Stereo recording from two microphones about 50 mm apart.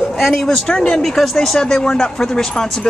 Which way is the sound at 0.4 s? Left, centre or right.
Centre.